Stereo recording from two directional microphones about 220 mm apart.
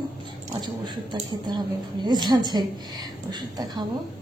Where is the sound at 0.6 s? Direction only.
20° right (ahead or behind).